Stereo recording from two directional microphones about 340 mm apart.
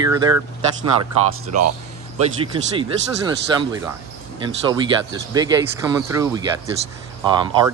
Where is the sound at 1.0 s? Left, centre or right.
Right.